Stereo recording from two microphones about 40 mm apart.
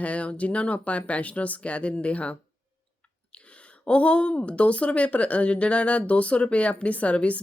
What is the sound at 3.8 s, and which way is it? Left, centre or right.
Speech, left.